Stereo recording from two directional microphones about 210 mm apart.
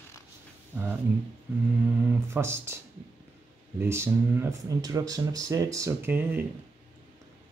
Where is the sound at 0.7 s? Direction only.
10° right (ahead or behind).